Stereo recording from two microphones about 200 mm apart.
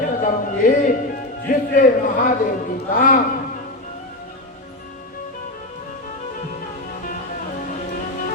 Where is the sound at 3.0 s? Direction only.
40° left (ahead or behind).